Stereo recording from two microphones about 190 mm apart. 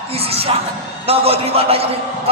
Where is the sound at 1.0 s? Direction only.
30° right (ahead or behind).